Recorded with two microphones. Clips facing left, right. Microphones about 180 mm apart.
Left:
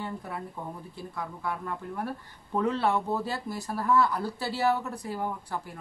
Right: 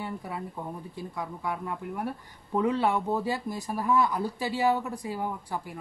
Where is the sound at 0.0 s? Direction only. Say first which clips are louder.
Right 1 dB; 10° right (ahead or behind).